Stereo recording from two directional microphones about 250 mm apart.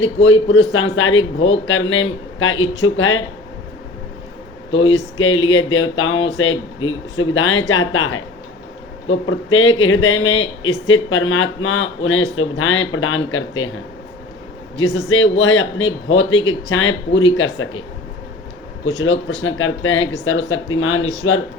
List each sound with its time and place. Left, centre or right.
0.0 s speech: left
4.9 s speech: left
14.8 s speech: left
19.0 s speech: left